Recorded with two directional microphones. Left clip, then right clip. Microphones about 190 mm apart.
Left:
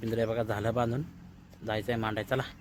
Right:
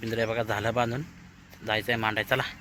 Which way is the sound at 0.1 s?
5° left (ahead or behind).